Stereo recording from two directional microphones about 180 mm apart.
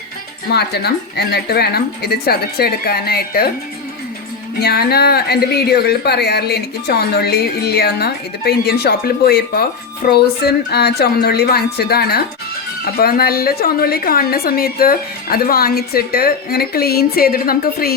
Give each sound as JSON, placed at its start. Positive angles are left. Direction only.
{"t": 0.5, "sound": "a woman's voice", "side_deg": 65}
{"t": 4.6, "sound": "a woman's voice", "side_deg": 60}